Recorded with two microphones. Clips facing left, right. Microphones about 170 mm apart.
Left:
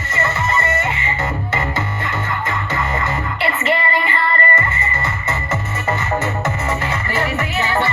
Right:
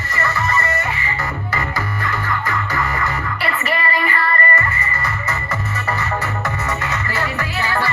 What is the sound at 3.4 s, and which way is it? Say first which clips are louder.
Music: left 3 dB; 25° left (ahead or behind).